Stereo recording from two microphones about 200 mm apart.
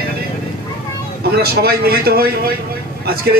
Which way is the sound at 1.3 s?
50° right (ahead or behind).